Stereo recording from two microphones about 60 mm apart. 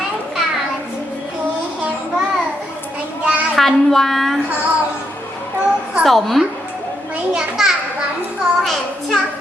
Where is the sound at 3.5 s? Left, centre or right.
Centre.